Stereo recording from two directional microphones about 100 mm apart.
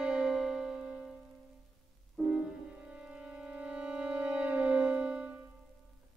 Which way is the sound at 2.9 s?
10° right (ahead or behind).